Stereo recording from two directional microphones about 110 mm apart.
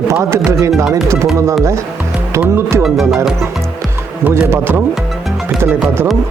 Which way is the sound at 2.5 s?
25° right (ahead or behind).